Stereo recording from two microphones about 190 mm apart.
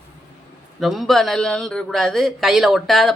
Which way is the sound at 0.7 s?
Centre (ahead or behind).